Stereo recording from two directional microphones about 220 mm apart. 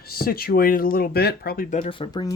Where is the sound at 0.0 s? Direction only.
45° left (ahead or behind).